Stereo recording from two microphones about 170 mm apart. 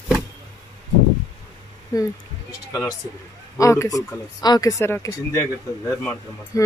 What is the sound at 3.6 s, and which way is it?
Speech, 20° left (ahead or behind).